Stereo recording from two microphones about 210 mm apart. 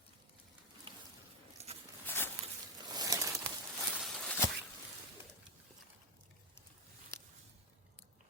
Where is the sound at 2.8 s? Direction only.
20° right (ahead or behind).